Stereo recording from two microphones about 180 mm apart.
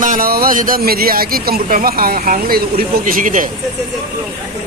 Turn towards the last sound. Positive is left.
turn(degrees=-45)  # may be behind; listen again after turning